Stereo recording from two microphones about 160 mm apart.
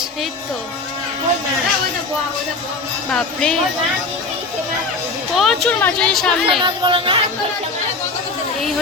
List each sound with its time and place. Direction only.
3.1 s speech: 5° left (ahead or behind)
5.3 s speech: centre (ahead or behind)
6.6 s speech: 30° right (ahead or behind)